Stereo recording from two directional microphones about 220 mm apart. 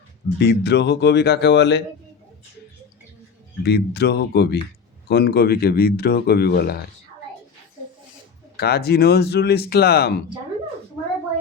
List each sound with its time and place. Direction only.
0.3 s speech: 50° left (ahead or behind)
3.6 s speech: 50° left (ahead or behind)
8.5 s speech: 45° left (ahead or behind)